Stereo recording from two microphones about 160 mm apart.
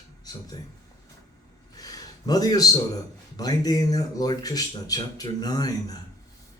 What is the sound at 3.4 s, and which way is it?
Speech, 25° left (ahead or behind).